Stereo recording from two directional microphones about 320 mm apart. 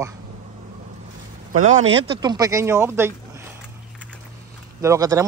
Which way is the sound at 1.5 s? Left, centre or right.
Right.